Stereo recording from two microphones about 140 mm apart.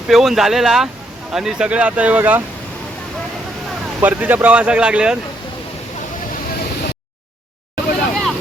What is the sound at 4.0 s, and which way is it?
Speech, 10° right (ahead or behind).